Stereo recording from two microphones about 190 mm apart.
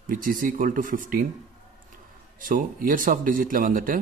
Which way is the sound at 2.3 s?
45° right (ahead or behind).